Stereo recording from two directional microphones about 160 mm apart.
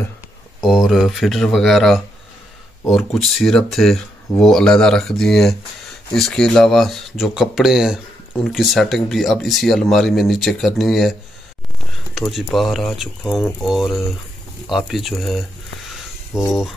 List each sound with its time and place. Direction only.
0.6 s speech: centre (ahead or behind)
12.2 s speech: centre (ahead or behind)